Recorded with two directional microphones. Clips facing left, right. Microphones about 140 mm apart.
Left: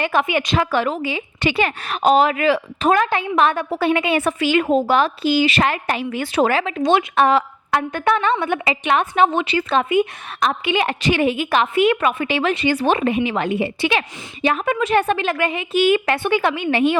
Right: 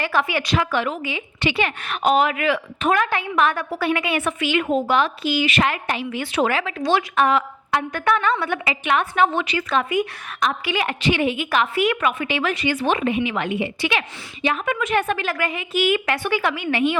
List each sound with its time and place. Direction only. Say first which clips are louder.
0.0 s a woman's voice: left 3 dB; 20° left (ahead or behind)
0.6 s a woman's voice: left 3 dB; 35° left (ahead or behind)
11.0 s a woman's voice: left 1 dB; 40° left (ahead or behind)
11.5 s a woman's voice: left 4 dB; 25° left (ahead or behind)